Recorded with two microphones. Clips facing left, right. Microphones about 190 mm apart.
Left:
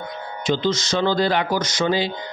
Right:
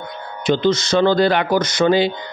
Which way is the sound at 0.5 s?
60° right (ahead or behind).